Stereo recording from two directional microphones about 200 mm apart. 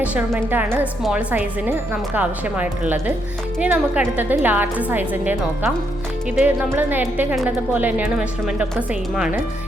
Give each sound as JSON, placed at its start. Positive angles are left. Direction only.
{"t": 0.0, "sound": "speech", "side_deg": -5}